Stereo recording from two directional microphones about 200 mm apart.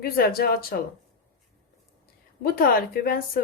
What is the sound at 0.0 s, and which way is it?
Speech, 45° left (ahead or behind).